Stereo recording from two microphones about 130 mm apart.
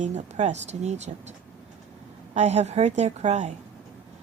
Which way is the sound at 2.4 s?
60° right (ahead or behind).